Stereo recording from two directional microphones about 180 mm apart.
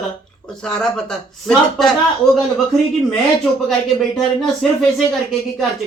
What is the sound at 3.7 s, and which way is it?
Speech, centre (ahead or behind).